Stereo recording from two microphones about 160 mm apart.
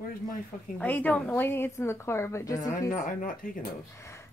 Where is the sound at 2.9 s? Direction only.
55° left (ahead or behind).